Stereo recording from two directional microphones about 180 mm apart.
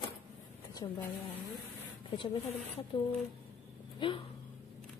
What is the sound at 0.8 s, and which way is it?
Speech, 25° left (ahead or behind).